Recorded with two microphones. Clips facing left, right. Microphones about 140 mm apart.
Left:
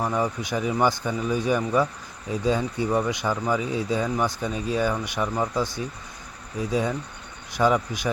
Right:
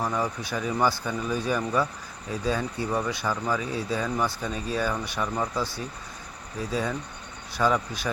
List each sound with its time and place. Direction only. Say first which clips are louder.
0.0 s speech: left 3 dB; 15° left (ahead or behind)